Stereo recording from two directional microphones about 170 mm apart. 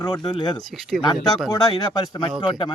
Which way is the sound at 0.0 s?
25° left (ahead or behind).